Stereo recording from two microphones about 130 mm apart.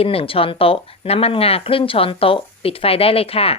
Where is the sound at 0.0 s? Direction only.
45° left (ahead or behind).